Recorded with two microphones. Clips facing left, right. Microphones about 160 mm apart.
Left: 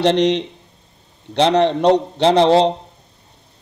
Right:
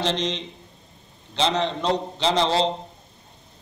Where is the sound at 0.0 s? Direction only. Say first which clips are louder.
Left 11 dB; 65° left (ahead or behind).